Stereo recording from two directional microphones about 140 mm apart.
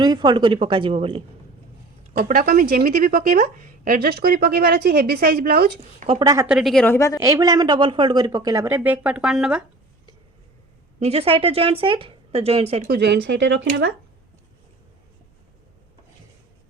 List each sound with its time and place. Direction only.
0.0 s speech: 30° right (ahead or behind)
2.1 s a woman's voice: 80° right
6.1 s speech: 30° right (ahead or behind)
6.5 s a woman's voice: centre (ahead or behind)
6.8 s a woman's voice: 20° left (ahead or behind)
7.2 s a woman's voice: 25° right (ahead or behind)
8.6 s speech: 15° right (ahead or behind)
11.0 s a woman's voice: 45° right (ahead or behind)